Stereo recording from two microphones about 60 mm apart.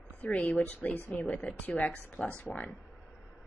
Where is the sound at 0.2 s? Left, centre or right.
Left.